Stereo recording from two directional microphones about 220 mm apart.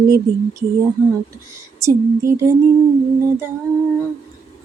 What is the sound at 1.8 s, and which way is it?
Child singing, 15° right (ahead or behind).